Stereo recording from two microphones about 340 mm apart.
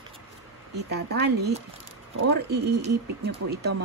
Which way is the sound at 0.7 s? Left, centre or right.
Right.